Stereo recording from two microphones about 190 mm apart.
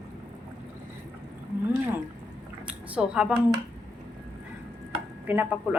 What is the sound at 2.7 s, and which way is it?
Speech, 5° right (ahead or behind).